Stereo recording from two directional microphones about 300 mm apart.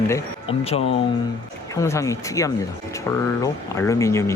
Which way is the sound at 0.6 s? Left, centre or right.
Centre.